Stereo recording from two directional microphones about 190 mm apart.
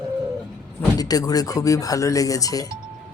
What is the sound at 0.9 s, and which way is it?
Speech, 20° left (ahead or behind).